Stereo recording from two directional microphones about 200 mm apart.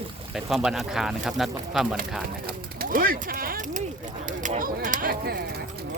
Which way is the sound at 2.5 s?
45° right (ahead or behind).